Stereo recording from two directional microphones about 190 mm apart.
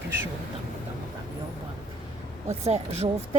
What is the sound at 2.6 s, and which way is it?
Speech, 35° right (ahead or behind).